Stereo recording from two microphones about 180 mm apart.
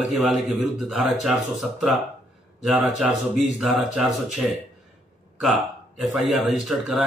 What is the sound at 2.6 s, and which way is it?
Speech, centre (ahead or behind).